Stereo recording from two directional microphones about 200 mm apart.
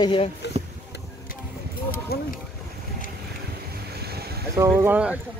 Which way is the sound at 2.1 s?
50° left (ahead or behind).